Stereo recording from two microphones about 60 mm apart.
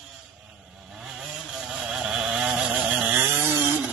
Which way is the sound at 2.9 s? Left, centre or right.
Centre.